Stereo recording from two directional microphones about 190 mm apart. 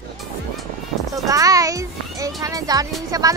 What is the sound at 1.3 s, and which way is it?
A child's voice, 20° right (ahead or behind).